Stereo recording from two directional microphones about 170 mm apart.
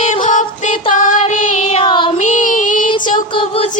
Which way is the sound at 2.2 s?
45° left (ahead or behind).